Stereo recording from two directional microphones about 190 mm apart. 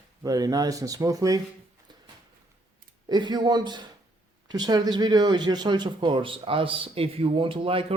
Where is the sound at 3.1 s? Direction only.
20° right (ahead or behind).